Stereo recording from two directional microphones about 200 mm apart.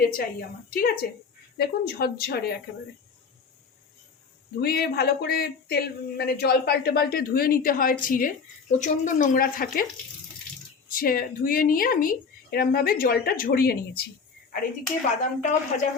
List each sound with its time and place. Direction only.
0.0 s speech: 45° left (ahead or behind)
4.6 s speech: 50° left (ahead or behind)
10.8 s speech: 45° left (ahead or behind)
15.2 s speech: 35° left (ahead or behind)